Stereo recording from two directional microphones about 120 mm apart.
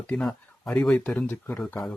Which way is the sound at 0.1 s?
5° left (ahead or behind).